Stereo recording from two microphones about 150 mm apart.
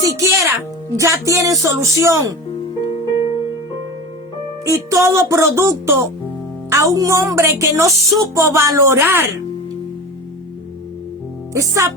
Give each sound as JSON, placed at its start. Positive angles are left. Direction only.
{"t": 0.2, "sound": "a woman's voice", "side_deg": -20}
{"t": 4.6, "sound": "a woman's voice", "side_deg": -20}
{"t": 11.5, "sound": "a woman's voice", "side_deg": -20}